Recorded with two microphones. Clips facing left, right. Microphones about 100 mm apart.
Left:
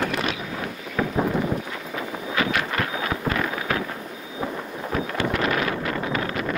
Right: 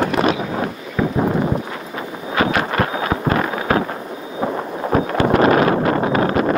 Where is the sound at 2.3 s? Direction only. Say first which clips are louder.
Right 7 dB; 40° right (ahead or behind).